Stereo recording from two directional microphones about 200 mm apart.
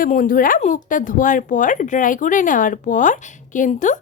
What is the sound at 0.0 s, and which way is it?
Speech, 45° left (ahead or behind).